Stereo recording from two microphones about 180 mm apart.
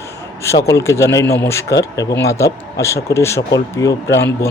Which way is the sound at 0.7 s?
15° left (ahead or behind).